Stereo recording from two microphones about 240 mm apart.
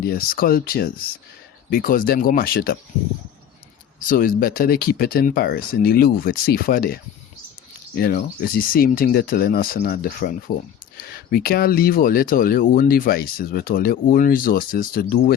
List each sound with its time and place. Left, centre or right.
0.0 s speech: left
4.1 s speech: left